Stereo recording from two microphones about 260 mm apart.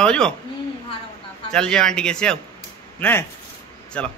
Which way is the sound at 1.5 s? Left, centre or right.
Centre.